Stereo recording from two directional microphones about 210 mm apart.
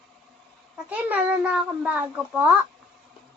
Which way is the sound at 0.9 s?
5° right (ahead or behind).